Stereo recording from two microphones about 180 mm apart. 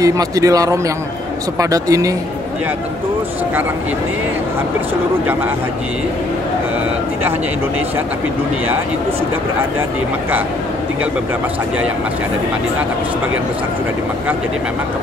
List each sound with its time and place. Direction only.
0.0 s a man's voice: 20° right (ahead or behind)